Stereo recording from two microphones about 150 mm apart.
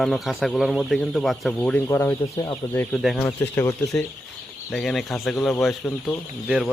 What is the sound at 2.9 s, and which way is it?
Speech, centre (ahead or behind).